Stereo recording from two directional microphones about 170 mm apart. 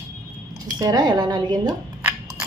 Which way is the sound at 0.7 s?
20° right (ahead or behind).